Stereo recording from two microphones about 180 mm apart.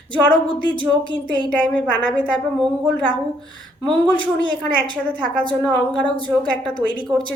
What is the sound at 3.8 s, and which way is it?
A woman's voice, 5° left (ahead or behind).